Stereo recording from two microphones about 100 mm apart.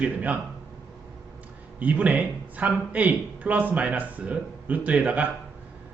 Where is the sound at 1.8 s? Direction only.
15° right (ahead or behind).